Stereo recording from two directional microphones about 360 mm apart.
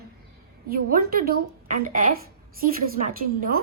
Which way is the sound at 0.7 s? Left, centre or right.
Right.